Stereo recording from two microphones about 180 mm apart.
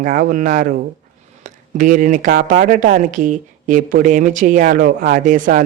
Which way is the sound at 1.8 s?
45° right (ahead or behind).